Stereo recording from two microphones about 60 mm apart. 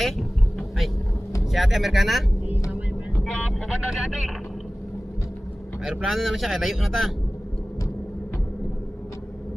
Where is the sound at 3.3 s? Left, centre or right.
Centre.